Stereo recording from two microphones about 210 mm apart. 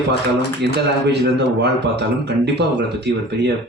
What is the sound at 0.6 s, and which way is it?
A man's voice, 55° right (ahead or behind).